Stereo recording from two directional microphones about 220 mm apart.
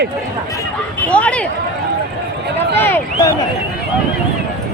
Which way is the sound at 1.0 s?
5° left (ahead or behind).